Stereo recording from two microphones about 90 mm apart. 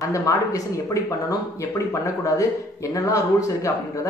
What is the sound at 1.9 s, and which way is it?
Speech, 35° left (ahead or behind).